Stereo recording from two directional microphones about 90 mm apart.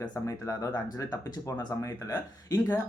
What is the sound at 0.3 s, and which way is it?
Speech, 35° left (ahead or behind).